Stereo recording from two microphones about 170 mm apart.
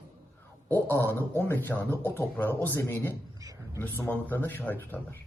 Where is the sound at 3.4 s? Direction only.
20° right (ahead or behind).